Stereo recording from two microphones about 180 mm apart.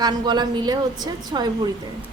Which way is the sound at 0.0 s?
25° right (ahead or behind).